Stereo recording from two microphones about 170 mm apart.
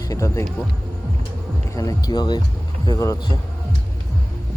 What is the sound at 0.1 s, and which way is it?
Speech, 15° left (ahead or behind).